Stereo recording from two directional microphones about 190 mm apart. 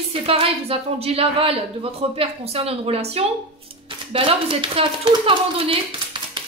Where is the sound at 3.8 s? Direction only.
30° right (ahead or behind).